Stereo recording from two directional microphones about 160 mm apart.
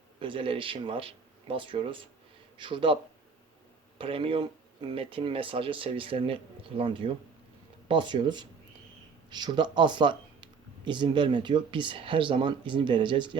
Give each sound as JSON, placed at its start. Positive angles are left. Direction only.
{"t": 0.2, "sound": "speech", "side_deg": -35}